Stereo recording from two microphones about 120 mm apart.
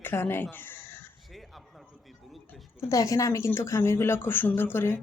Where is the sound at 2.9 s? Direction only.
30° left (ahead or behind).